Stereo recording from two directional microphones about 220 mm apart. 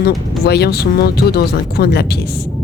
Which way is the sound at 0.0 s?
45° left (ahead or behind).